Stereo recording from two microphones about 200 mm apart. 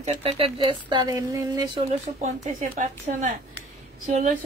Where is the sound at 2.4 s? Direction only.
35° right (ahead or behind).